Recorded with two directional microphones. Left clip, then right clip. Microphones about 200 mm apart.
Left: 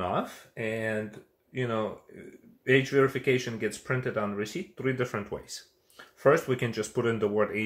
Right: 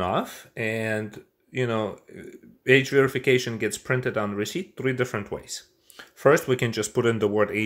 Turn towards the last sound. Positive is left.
turn(degrees=-45)  # may be behind; listen again after turning